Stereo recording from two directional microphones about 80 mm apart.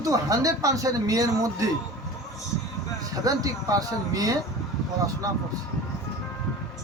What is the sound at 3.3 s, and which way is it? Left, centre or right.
Speech, right.